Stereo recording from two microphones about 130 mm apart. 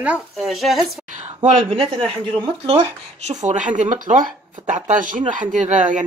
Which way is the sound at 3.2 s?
65° right (ahead or behind).